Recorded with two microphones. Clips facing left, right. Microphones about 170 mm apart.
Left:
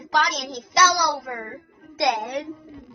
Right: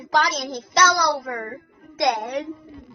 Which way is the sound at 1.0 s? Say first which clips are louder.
Right 2 dB; 25° left (ahead or behind).